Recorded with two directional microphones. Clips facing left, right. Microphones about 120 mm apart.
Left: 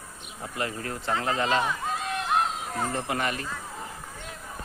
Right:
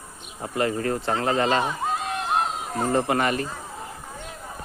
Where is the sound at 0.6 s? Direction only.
55° right (ahead or behind).